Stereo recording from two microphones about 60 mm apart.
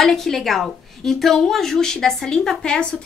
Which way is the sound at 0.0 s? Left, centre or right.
Centre.